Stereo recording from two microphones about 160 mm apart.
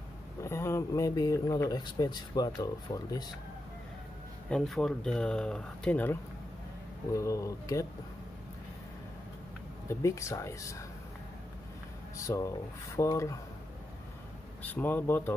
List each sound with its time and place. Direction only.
0.4 s speech: 15° left (ahead or behind)
4.5 s speech: 5° left (ahead or behind); by 7.8 s 20° left (ahead or behind)
9.8 s speech: 20° left (ahead or behind)
12.3 s speech: 20° left (ahead or behind)
14.6 s speech: 10° left (ahead or behind)